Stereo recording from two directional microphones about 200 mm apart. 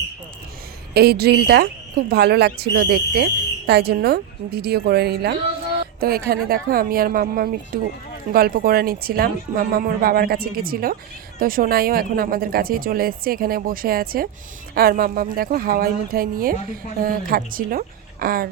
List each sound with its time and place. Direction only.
0.9 s speech: 50° right (ahead or behind)